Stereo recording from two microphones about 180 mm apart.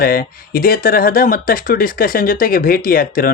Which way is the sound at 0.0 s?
55° left (ahead or behind).